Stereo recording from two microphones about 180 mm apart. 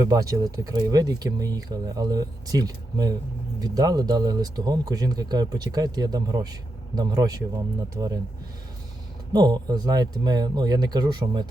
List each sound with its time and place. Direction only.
0.0 s speech: 20° right (ahead or behind)
9.3 s speech: 20° right (ahead or behind)